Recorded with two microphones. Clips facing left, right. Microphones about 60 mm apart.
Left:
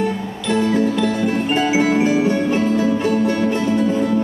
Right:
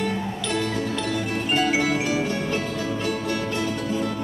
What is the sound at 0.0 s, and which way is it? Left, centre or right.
Music, left.